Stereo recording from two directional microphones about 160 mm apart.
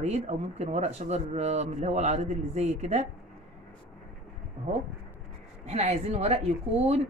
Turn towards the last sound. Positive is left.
turn(degrees=-40)  # may be behind; listen again after turning